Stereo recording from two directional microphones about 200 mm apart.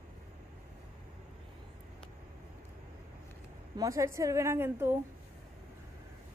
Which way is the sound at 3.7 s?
15° right (ahead or behind).